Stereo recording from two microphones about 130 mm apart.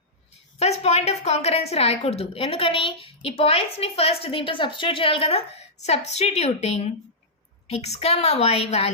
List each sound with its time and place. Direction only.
0.6 s a woman's voice: 55° left (ahead or behind)